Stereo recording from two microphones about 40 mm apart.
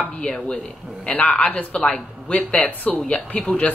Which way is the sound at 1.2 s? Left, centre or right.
Left.